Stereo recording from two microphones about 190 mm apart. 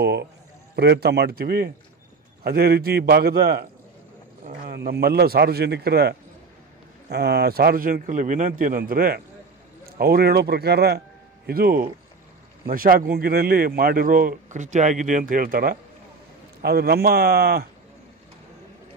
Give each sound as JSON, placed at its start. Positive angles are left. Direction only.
{"t": 0.0, "sound": "a man's voice", "side_deg": -60}